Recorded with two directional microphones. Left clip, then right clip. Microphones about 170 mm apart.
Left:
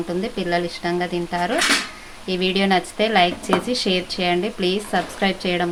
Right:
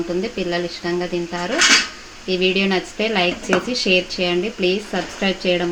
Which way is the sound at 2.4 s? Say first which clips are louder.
Even; 35° left (ahead or behind).